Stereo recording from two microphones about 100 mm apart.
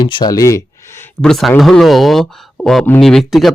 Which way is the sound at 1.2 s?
5° left (ahead or behind).